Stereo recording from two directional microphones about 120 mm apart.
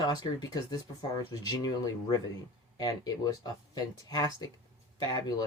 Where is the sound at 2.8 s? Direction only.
35° left (ahead or behind).